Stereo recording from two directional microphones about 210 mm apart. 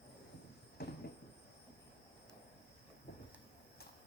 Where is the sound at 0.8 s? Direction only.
50° left (ahead or behind).